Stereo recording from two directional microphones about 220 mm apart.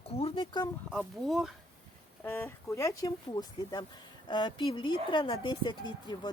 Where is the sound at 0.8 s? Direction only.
Centre (ahead or behind).